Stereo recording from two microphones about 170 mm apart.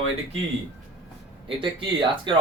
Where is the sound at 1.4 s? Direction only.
30° right (ahead or behind).